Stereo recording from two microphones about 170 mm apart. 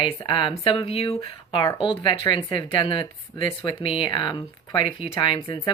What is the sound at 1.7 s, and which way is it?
Speech, 30° left (ahead or behind).